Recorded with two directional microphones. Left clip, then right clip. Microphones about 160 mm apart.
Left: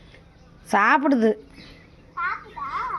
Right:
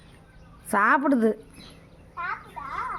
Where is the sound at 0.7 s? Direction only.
5° right (ahead or behind).